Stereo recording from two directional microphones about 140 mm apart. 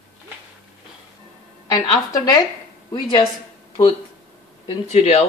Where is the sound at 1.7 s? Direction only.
30° left (ahead or behind).